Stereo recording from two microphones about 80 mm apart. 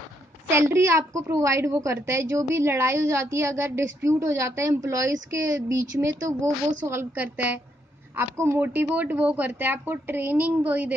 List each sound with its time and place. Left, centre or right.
0.5 s a woman's voice: right
7.0 s a woman's voice: right